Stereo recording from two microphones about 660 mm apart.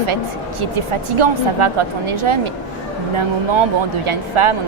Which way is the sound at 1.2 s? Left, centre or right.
Right.